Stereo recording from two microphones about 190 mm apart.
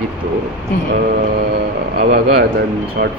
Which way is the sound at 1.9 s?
60° right (ahead or behind).